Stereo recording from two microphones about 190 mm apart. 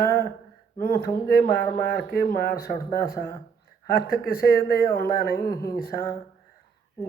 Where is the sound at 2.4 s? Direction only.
55° left (ahead or behind).